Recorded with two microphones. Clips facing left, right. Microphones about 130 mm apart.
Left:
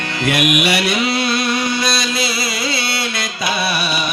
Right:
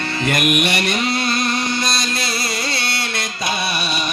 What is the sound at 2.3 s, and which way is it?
Music, 50° right (ahead or behind).